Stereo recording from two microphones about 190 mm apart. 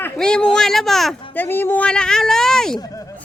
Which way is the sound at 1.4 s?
10° left (ahead or behind).